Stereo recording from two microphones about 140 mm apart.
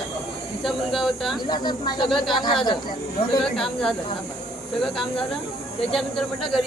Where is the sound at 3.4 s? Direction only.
5° left (ahead or behind).